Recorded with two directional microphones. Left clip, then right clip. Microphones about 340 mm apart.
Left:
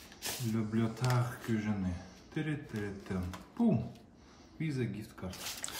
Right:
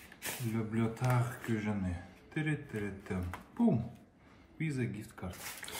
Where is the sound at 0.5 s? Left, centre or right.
Centre.